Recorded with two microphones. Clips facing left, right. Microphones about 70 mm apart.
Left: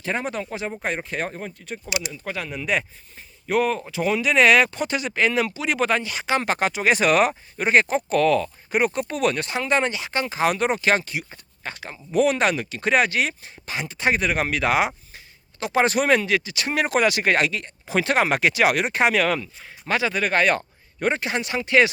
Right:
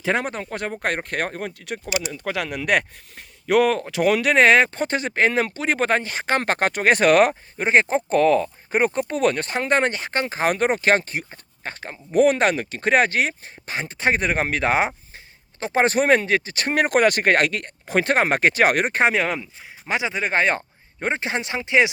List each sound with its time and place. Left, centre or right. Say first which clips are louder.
0.8 s speech: right 4 dB; right
2.0 s speech: right 5 dB; right
3.8 s speech: right 3 dB; right
4.4 s speech: even; right
7.6 s speech: right 1 dB; right